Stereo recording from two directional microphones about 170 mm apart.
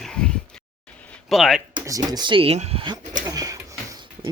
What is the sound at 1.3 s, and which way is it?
Speech, centre (ahead or behind).